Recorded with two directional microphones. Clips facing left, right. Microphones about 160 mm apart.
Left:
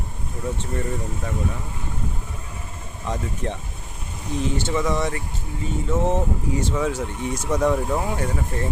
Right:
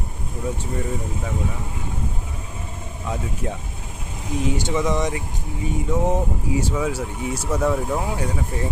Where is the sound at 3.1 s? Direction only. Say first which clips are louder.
Even; 10° right (ahead or behind).